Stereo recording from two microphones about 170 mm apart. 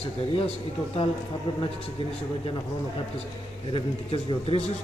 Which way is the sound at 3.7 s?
30° left (ahead or behind).